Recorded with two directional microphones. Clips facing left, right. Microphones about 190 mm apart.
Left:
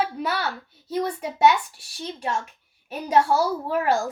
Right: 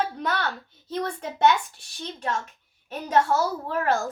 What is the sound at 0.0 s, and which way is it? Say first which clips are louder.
A child's voice: left 1 dB; 10° left (ahead or behind).